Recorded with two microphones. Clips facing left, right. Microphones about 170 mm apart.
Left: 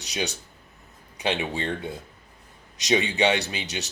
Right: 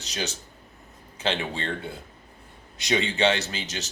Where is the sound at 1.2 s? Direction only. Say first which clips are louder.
Left 1 dB; 15° left (ahead or behind).